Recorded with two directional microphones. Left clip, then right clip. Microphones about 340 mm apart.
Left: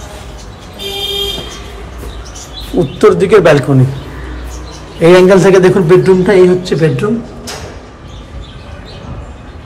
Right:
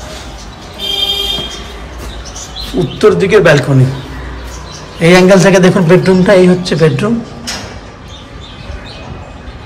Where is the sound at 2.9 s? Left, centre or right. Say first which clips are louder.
Left 1 dB; centre.